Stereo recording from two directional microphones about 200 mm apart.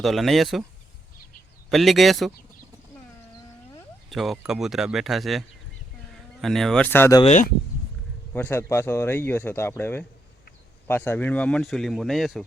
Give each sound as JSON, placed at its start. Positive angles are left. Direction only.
{"t": 0.0, "sound": "speech", "side_deg": 0}
{"t": 1.7, "sound": "speech", "side_deg": 0}
{"t": 4.1, "sound": "speech", "side_deg": 0}
{"t": 7.2, "sound": "speech", "side_deg": 35}
{"t": 8.3, "sound": "speech", "side_deg": 10}